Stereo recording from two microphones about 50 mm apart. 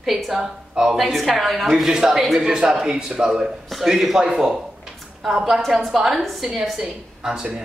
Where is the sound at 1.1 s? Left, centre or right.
Centre.